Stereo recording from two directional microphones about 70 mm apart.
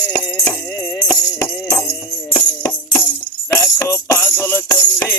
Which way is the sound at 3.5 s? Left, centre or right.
Left.